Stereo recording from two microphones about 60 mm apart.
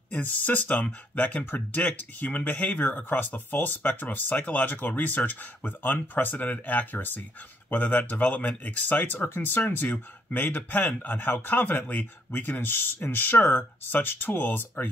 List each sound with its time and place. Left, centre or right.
0.1 s speech: left